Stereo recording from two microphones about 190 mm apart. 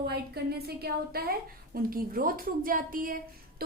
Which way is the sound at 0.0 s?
55° right (ahead or behind).